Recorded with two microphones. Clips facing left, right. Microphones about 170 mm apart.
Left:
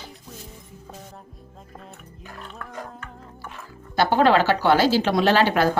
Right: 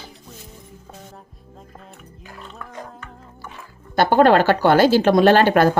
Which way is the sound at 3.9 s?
50° right (ahead or behind).